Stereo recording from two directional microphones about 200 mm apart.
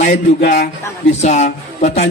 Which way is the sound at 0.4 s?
40° left (ahead or behind).